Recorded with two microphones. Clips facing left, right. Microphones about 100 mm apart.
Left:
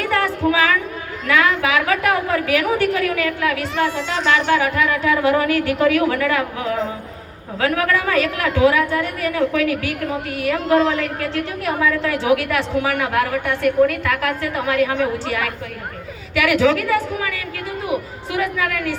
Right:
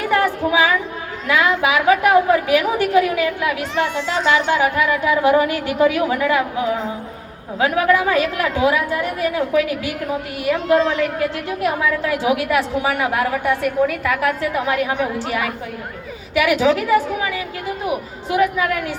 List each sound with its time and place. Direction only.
0.0 s a sound: 20° right (ahead or behind)
1.3 s a woman's voice: 20° right (ahead or behind)
7.6 s a woman's voice: 20° right (ahead or behind)
13.6 s a woman's voice: 5° right (ahead or behind); by 18.9 s 20° right (ahead or behind)